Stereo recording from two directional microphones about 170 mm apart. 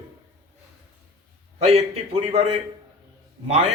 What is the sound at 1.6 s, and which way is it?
Speech, 35° right (ahead or behind).